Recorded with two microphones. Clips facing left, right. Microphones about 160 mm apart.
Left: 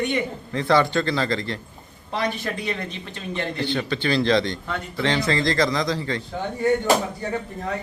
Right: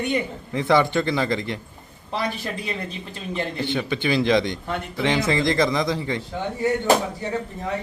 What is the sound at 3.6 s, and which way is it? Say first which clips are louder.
A man's voice: even; 15° right (ahead or behind).